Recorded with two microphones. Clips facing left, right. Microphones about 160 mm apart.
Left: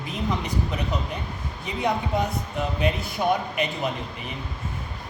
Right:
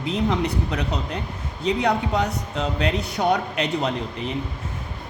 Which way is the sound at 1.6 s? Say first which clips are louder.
Right 5 dB; 90° right.